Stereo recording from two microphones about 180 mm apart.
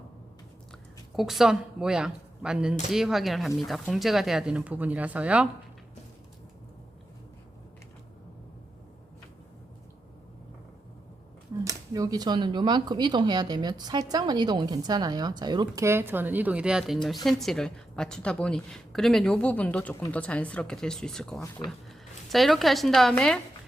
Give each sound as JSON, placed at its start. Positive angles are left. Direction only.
{"t": 1.1, "sound": "a woman's voice", "side_deg": 0}
{"t": 11.6, "sound": "a woman's voice", "side_deg": -20}